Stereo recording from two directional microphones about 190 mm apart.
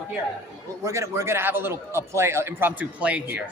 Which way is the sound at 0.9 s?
15° right (ahead or behind).